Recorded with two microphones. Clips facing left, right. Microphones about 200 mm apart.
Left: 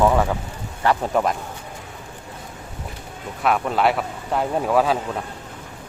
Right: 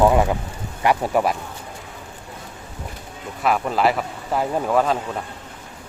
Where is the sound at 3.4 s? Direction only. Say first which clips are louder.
Even; centre (ahead or behind).